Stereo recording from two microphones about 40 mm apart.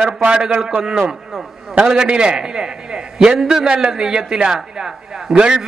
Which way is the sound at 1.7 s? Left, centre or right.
Centre.